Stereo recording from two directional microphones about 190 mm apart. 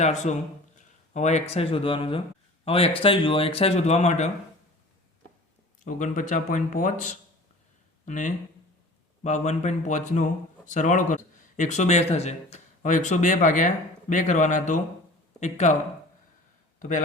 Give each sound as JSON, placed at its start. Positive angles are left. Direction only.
{"t": 0.0, "sound": "speech", "side_deg": 35}
{"t": 5.8, "sound": "speech", "side_deg": 40}